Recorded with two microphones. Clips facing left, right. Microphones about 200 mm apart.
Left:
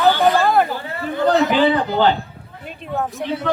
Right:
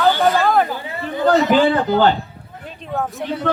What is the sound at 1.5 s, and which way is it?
Speech, 45° right (ahead or behind).